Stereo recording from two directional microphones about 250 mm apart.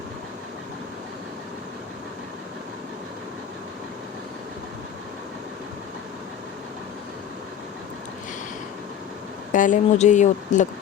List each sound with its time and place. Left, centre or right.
9.5 s speech: left